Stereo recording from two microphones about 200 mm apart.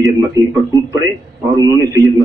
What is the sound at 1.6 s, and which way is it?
Speech, 15° right (ahead or behind).